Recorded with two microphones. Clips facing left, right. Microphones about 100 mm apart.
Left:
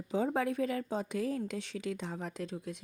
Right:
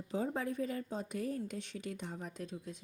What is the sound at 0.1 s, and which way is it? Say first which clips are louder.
A woman's voice: left 5 dB; 85° left.